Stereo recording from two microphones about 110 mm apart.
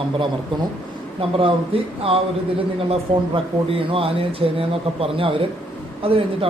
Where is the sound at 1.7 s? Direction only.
55° right (ahead or behind).